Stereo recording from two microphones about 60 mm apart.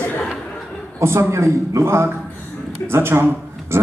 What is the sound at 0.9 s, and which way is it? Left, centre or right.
A man's voice, right.